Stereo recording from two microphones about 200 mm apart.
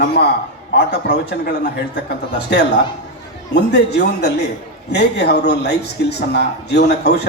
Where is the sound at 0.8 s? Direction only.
55° left (ahead or behind).